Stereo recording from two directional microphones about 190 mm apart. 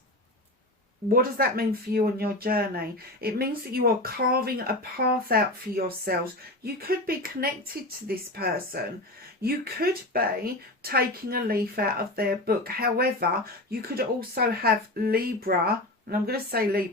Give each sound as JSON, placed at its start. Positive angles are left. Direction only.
{"t": 1.0, "sound": "speech", "side_deg": -50}